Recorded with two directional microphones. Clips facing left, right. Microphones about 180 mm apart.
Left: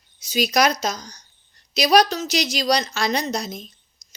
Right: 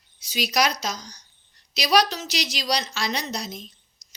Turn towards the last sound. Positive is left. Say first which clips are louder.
# left 6 dB
turn(degrees=45)  # may be behind; listen again after turning